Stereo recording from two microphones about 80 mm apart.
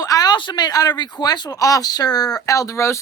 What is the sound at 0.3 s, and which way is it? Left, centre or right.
Speech, left.